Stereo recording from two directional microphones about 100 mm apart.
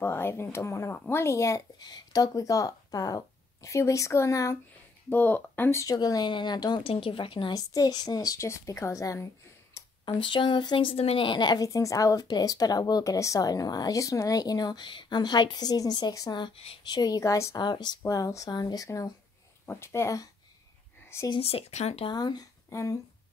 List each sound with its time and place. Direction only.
0.0 s speech: 25° left (ahead or behind)
1.8 s speech: 45° left (ahead or behind)
5.1 s speech: 20° left (ahead or behind)
5.9 s speech: 40° left (ahead or behind)
6.8 s speech: 65° left (ahead or behind)
7.5 s speech: 40° left (ahead or behind)
10.0 s speech: 55° left (ahead or behind); by 17.6 s 30° left (ahead or behind)
17.6 s speech: 45° left (ahead or behind)
18.0 s speech: 35° left (ahead or behind)
21.4 s speech: 75° left (ahead or behind)
22.1 s speech: 45° left (ahead or behind)
22.7 s speech: 30° left (ahead or behind)